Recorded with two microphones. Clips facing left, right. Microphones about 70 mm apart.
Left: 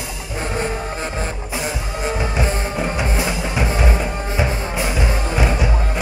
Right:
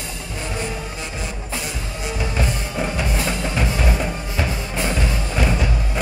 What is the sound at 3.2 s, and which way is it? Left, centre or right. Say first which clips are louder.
Music: left 2 dB; centre.